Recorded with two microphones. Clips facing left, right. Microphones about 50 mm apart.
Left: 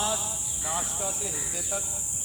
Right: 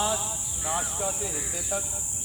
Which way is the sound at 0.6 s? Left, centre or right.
Centre.